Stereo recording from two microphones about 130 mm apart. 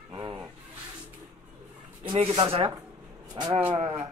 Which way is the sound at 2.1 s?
45° right (ahead or behind).